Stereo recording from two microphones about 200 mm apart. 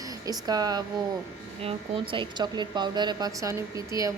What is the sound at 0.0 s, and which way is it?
A woman's voice, 20° right (ahead or behind).